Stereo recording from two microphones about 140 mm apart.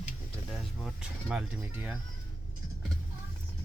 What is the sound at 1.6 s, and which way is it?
Speech, 15° right (ahead or behind).